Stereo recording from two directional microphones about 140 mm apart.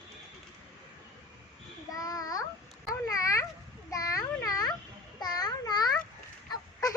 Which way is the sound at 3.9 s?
25° left (ahead or behind).